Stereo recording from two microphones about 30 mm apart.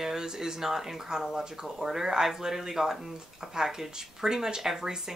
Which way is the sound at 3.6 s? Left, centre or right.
Right.